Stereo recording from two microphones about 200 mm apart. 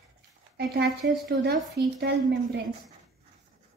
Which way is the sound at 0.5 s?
55° right (ahead or behind).